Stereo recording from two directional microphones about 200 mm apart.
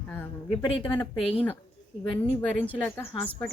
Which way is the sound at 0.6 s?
25° left (ahead or behind).